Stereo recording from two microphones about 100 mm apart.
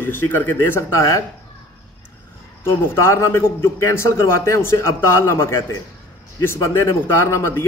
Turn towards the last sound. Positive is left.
turn(degrees=25)  # may be behind; listen again after turning